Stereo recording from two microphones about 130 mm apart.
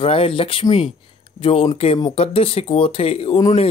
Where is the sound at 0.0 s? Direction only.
45° left (ahead or behind).